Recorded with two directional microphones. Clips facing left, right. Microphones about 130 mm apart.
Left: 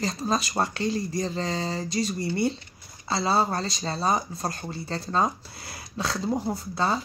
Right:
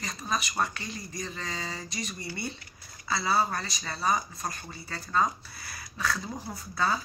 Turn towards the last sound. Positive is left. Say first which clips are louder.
# left 4 dB
turn(degrees=25)  # may be behind; listen again after turning